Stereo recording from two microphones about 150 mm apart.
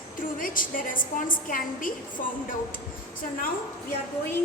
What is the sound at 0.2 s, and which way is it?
A woman's voice, 65° left (ahead or behind).